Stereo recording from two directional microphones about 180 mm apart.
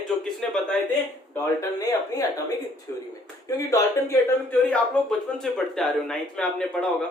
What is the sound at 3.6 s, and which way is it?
Speech, 20° left (ahead or behind).